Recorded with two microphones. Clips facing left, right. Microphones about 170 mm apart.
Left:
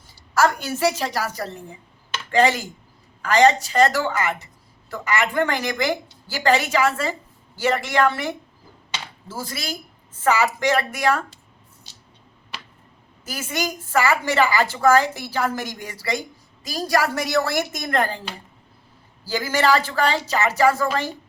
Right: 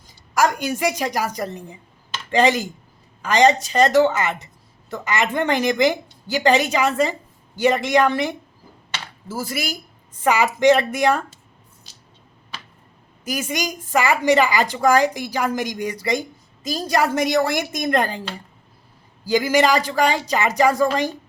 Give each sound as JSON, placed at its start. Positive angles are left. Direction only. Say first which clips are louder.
{"t": 0.3, "sound": "a woman's voice", "louder": "right 1 dB", "side_deg": -15}
{"t": 13.2, "sound": "a woman's voice", "louder": "right 2 dB", "side_deg": -15}
{"t": 19.2, "sound": "a woman's voice", "louder": "right 4 dB", "side_deg": -15}